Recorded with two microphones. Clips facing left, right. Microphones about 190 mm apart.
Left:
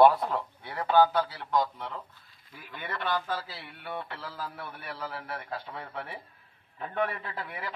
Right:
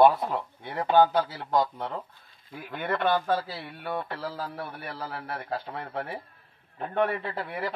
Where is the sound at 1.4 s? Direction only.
45° right (ahead or behind).